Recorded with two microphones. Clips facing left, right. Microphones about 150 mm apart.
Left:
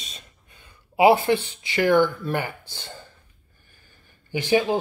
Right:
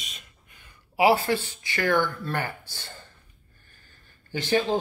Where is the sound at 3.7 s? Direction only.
15° left (ahead or behind).